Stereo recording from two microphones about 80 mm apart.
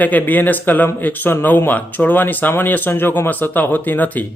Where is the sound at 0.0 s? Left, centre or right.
Left.